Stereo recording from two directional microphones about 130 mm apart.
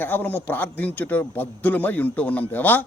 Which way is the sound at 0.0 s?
15° left (ahead or behind).